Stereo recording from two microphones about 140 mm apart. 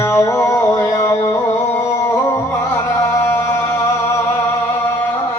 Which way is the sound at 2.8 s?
20° left (ahead or behind).